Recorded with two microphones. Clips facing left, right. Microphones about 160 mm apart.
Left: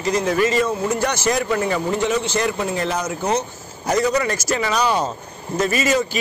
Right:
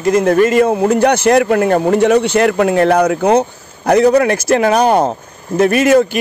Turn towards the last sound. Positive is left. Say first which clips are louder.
# right 9 dB
turn(degrees=-60)  # may be behind; listen again after turning